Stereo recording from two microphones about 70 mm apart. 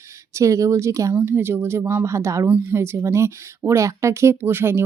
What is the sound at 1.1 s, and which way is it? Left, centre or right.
Speech, right.